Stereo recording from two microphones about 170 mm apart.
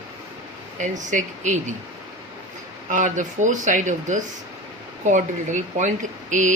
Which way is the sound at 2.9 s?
45° right (ahead or behind).